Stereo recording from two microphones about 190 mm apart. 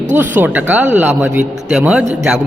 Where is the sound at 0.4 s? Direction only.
10° right (ahead or behind).